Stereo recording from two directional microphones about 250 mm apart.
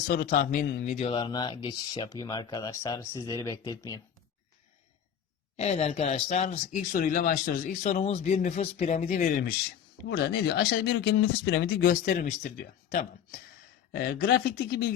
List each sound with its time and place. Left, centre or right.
0.1 s speech: left; by 4.0 s centre
5.5 s speech: left